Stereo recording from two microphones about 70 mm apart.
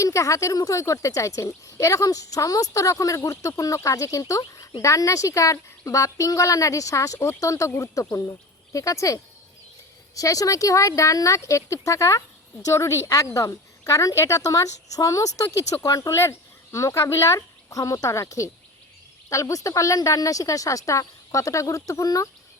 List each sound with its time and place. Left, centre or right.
0.0 s speech: left